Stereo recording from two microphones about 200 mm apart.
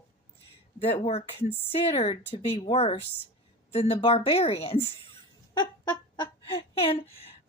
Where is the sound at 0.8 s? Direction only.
30° left (ahead or behind).